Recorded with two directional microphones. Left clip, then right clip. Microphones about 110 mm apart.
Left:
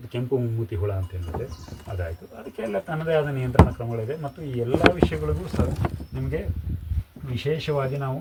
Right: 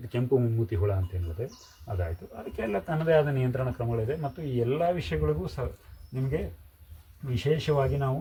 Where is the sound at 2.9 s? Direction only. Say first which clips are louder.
Right 1 dB; 25° right (ahead or behind).